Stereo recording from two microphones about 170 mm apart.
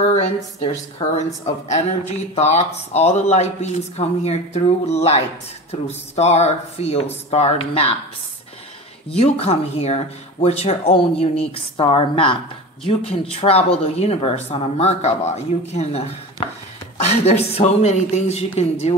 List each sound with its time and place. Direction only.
0.1 s a woman's voice: 40° left (ahead or behind)
9.1 s a woman's voice: 35° left (ahead or behind)